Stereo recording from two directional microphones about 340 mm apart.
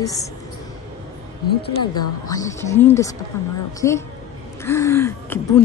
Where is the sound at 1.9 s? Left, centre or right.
Centre.